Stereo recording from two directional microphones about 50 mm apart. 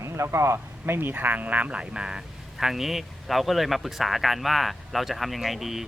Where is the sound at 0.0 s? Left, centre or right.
Right.